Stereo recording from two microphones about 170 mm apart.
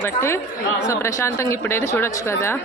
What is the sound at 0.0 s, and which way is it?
Speech, 15° left (ahead or behind).